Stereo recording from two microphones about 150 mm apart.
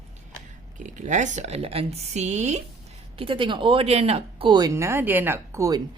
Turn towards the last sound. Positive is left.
turn(degrees=-20)  # may be behind; listen again after turning